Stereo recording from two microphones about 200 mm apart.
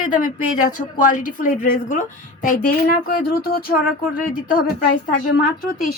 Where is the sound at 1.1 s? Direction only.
40° left (ahead or behind).